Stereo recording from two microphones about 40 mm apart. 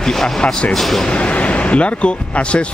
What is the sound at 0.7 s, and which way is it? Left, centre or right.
Speech, centre.